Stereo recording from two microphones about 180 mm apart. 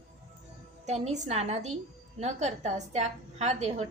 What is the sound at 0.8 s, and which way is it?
A woman's voice, 40° right (ahead or behind).